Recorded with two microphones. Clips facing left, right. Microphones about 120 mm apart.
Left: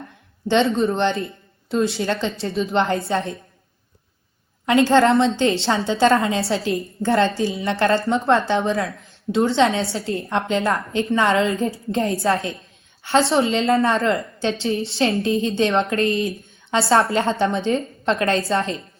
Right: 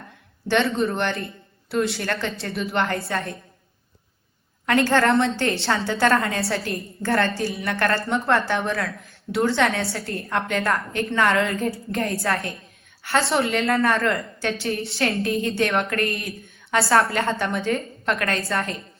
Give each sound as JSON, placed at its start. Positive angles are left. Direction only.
{"t": 0.4, "sound": "a woman's voice", "side_deg": 20}
{"t": 4.6, "sound": "a woman's voice", "side_deg": 20}